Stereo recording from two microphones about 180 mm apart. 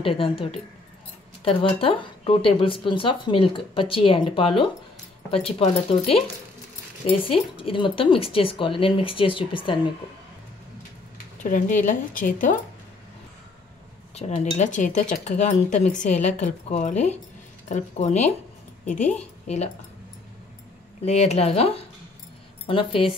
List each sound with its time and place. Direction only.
0.0 s a woman's voice: 30° left (ahead or behind)
11.4 s speech: 50° left (ahead or behind)
14.1 s a woman's voice: 40° left (ahead or behind)
19.4 s speech: 40° left (ahead or behind)
21.0 s a woman's voice: 35° left (ahead or behind)